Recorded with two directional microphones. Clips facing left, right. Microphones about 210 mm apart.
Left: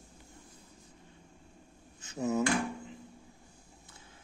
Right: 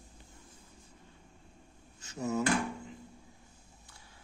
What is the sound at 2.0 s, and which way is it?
Drawer open or close, 20° left (ahead or behind).